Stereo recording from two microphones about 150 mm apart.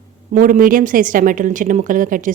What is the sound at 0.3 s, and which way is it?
A woman's voice, 65° right (ahead or behind).